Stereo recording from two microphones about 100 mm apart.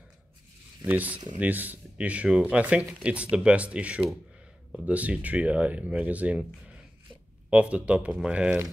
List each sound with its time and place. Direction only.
0.8 s speech: 15° right (ahead or behind)
7.4 s speech: 10° right (ahead or behind)